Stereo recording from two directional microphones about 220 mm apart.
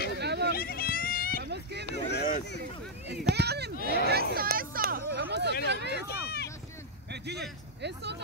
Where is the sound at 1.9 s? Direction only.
50° left (ahead or behind).